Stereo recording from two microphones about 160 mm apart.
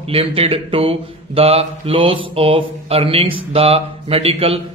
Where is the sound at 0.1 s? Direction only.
35° right (ahead or behind).